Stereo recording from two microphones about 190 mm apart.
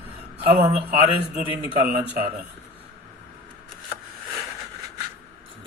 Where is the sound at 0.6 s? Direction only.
30° right (ahead or behind).